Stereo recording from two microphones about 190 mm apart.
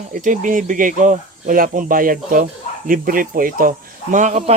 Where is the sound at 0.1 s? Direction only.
45° right (ahead or behind).